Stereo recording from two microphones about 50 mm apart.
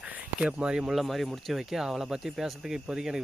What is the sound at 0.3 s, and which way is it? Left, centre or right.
Speech, centre.